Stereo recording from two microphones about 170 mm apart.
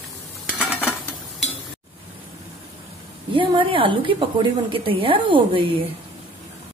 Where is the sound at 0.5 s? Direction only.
10° left (ahead or behind).